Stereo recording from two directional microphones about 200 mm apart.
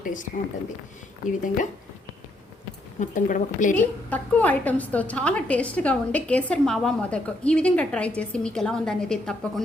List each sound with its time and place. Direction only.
0.0 s a woman's voice: 40° left (ahead or behind)
3.0 s a woman's voice: 40° left (ahead or behind)
3.8 s a woman's voice: 10° left (ahead or behind)